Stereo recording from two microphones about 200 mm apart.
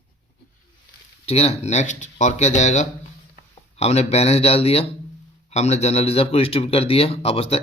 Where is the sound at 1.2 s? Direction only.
30° left (ahead or behind).